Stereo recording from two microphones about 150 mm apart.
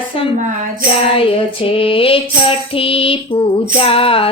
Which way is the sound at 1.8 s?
35° left (ahead or behind).